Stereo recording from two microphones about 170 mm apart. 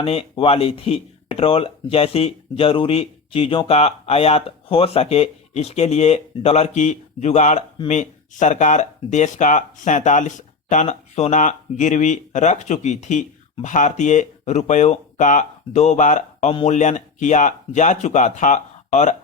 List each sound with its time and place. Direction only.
0.0 s speech: 35° left (ahead or behind)